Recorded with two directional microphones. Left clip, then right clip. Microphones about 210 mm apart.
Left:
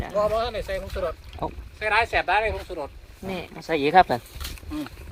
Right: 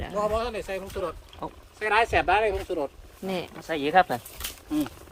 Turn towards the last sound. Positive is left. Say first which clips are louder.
# right 4 dB
turn(degrees=-45)  # may be behind; listen again after turning